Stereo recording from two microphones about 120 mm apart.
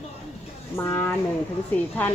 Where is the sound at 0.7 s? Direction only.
20° left (ahead or behind).